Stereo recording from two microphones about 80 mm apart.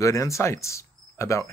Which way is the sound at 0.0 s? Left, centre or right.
Left.